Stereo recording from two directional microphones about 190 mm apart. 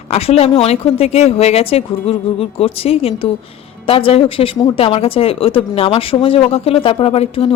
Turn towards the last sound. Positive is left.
turn(degrees=30)  # may be behind; listen again after turning